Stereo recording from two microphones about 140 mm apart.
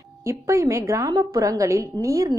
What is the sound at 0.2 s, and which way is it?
A woman's voice, 20° right (ahead or behind).